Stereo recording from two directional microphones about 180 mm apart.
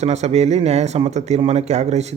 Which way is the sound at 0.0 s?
35° right (ahead or behind).